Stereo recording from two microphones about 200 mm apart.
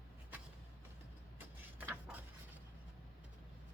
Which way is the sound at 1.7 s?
10° right (ahead or behind).